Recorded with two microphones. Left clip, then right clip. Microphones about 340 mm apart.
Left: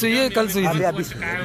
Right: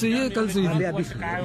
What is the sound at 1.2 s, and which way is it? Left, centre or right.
Speech, right.